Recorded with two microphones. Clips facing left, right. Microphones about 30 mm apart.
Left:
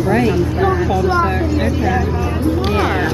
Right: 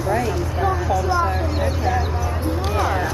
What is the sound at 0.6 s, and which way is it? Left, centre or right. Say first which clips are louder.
Vehicle: left 4 dB; left.